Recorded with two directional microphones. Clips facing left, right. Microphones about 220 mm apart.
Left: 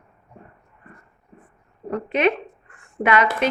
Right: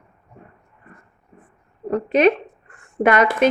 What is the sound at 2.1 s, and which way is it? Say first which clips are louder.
A woman's voice: right 5 dB; 40° right (ahead or behind).